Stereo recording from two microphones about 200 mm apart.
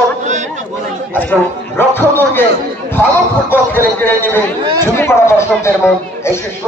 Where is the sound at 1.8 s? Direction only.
10° left (ahead or behind).